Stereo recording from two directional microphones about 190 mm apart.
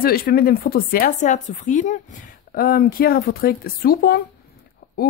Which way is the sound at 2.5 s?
50° left (ahead or behind).